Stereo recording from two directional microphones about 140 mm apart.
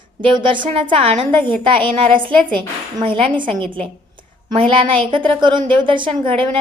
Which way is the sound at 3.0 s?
35° right (ahead or behind).